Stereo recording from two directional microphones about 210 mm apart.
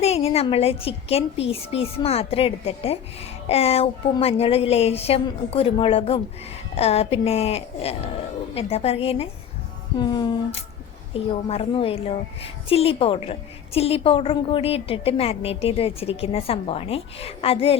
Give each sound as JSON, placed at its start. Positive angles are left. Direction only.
{"t": 0.0, "sound": "a woman's voice", "side_deg": 30}